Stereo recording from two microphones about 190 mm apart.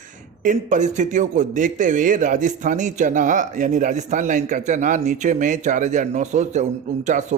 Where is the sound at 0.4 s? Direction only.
40° right (ahead or behind).